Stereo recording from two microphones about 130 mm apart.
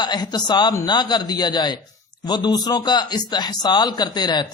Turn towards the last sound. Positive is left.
turn(degrees=30)  # may be behind; listen again after turning